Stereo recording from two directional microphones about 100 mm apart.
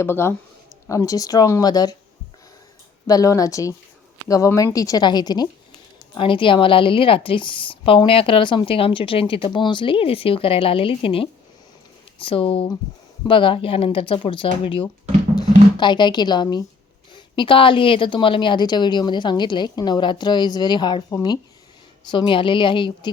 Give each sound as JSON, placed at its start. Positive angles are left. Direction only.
{"t": 0.0, "sound": "speech", "side_deg": 25}
{"t": 3.1, "sound": "speech", "side_deg": 35}
{"t": 6.1, "sound": "a woman's voice", "side_deg": 60}
{"t": 15.4, "sound": "a woman's voice", "side_deg": 50}
{"t": 17.3, "sound": "a woman's voice", "side_deg": 60}